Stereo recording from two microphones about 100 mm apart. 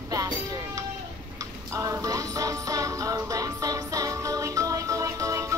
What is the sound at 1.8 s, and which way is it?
Music, 35° right (ahead or behind).